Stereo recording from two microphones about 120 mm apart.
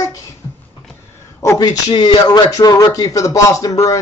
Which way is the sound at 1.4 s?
30° left (ahead or behind).